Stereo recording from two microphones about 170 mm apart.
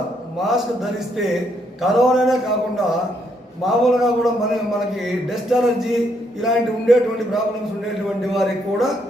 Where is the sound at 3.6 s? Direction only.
Centre (ahead or behind).